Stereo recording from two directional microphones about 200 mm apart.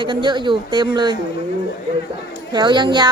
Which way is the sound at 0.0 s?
25° right (ahead or behind).